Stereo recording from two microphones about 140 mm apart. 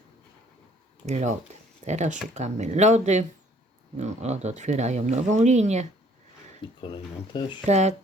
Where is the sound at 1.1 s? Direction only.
55° right (ahead or behind).